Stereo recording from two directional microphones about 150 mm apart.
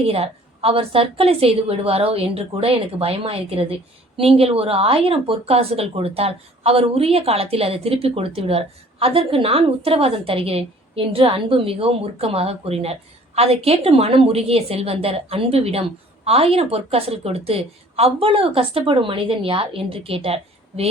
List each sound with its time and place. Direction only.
0.0 s speech: 40° right (ahead or behind)